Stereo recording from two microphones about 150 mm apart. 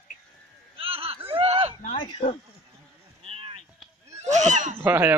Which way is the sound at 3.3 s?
40° right (ahead or behind).